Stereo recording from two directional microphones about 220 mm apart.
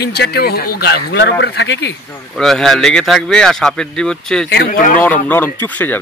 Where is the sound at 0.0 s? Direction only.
45° left (ahead or behind).